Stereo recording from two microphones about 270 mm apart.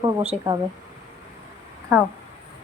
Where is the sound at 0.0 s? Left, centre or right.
Centre.